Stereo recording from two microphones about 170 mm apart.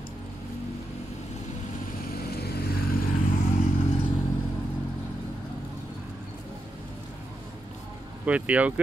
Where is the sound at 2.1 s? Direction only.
65° left (ahead or behind).